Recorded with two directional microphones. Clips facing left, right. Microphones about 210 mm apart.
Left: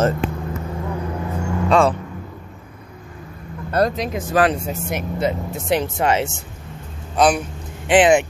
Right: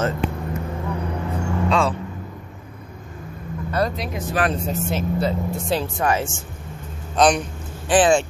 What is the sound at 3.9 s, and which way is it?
Speech, 90° left.